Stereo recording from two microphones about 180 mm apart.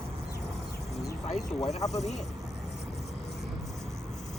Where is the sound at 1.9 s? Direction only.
40° left (ahead or behind).